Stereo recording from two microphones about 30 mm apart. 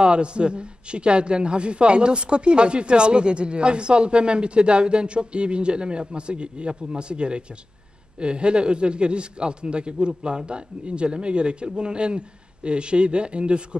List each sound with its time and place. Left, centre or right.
0.0 s a man's voice: right